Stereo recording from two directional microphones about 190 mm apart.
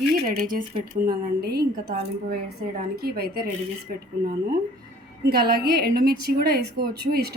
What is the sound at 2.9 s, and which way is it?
Speech, 55° right (ahead or behind).